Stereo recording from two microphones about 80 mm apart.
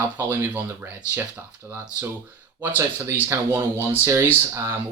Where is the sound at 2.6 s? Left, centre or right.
Right.